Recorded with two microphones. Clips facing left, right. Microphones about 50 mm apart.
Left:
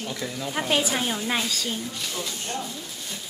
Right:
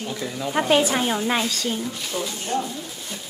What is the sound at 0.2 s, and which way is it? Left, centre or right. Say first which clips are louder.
Speech: right 6 dB; centre.